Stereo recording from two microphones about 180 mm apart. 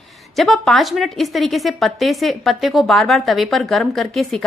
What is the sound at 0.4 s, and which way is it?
A woman's voice, centre (ahead or behind).